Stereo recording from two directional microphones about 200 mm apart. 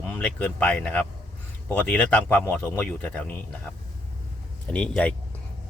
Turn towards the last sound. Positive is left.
turn(degrees=5)  # may be behind; listen again after turning